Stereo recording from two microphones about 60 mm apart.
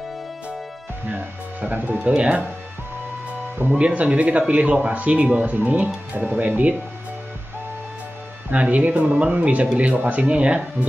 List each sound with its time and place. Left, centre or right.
1.7 s speech: right
3.7 s speech: right
8.5 s speech: right